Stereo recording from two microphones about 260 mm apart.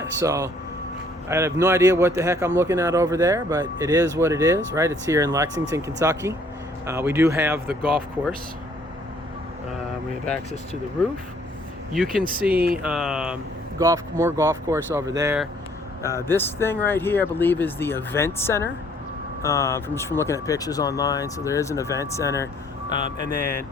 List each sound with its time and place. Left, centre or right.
0.0 s speech: centre
12.2 s speech: right
12.8 s speech: centre
16.0 s speech: centre
22.9 s speech: right